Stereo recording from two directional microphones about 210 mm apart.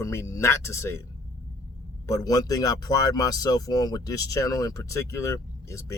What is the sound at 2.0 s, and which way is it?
Speech, 15° left (ahead or behind).